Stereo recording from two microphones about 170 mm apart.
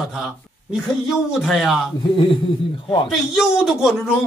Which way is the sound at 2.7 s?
30° left (ahead or behind).